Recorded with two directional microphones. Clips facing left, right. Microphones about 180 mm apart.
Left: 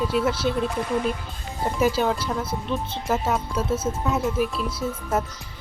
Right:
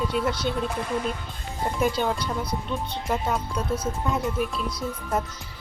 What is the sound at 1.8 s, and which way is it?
Speech, 5° left (ahead or behind).